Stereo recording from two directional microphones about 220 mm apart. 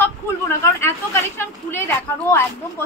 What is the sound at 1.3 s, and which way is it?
A woman's voice, 10° left (ahead or behind).